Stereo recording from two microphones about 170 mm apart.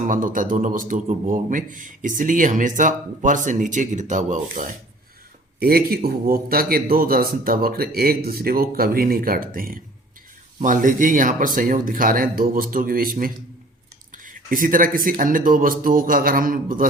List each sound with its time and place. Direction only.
0.0 s speech: 50° right (ahead or behind)
5.5 s a man's voice: 60° right (ahead or behind)